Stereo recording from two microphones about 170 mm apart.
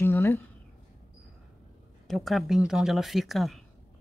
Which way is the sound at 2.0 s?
Centre (ahead or behind).